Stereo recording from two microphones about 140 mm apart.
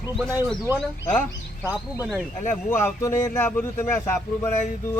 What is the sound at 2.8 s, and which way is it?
A man's voice, 20° left (ahead or behind).